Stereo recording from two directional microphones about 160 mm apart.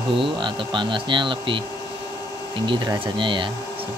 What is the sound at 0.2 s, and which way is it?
Speech, 30° right (ahead or behind).